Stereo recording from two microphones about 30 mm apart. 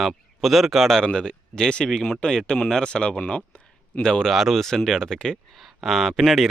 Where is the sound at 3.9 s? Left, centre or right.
Left.